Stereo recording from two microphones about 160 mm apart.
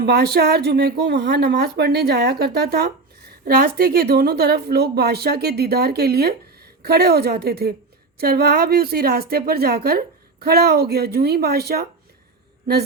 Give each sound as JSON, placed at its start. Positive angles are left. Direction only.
{"t": 0.0, "sound": "a woman's voice", "side_deg": -85}